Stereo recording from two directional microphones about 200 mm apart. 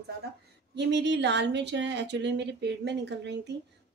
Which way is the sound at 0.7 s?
60° right (ahead or behind).